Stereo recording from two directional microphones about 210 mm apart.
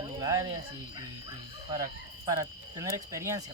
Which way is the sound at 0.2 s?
15° right (ahead or behind).